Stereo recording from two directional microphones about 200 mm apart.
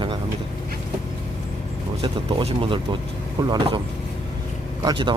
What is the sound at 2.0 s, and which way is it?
Speech, 25° right (ahead or behind).